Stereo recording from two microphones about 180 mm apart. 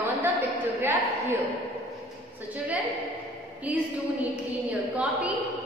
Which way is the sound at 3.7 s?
5° right (ahead or behind).